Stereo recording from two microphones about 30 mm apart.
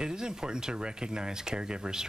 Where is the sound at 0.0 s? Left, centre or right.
Right.